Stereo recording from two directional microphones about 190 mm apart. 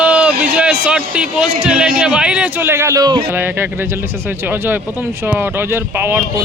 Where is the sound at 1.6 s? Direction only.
5° right (ahead or behind).